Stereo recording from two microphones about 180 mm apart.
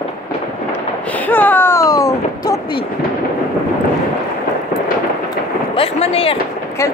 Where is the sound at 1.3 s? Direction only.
10° left (ahead or behind).